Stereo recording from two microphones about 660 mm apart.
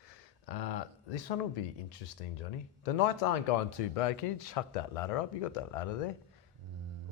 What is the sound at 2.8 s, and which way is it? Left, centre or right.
Speech, left.